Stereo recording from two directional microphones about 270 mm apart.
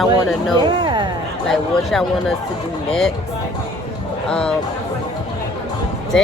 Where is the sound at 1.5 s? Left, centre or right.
Centre.